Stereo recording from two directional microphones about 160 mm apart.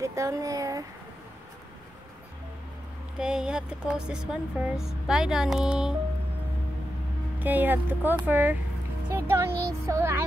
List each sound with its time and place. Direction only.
0.0 s speech: 20° right (ahead or behind)
3.2 s speech: 5° right (ahead or behind)
7.3 s speech: 10° right (ahead or behind)